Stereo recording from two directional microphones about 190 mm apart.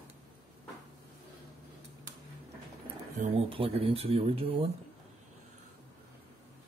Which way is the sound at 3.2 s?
30° right (ahead or behind).